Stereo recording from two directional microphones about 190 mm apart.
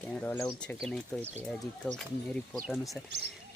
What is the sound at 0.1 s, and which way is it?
Speech, 10° left (ahead or behind).